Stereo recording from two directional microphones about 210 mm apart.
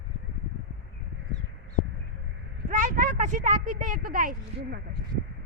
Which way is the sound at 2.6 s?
35° right (ahead or behind).